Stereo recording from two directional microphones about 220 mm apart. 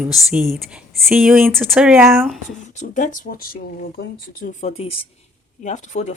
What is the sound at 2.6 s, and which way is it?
Speech, 35° left (ahead or behind).